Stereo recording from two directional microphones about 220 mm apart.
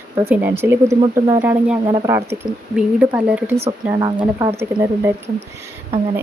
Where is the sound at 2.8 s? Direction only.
5° right (ahead or behind).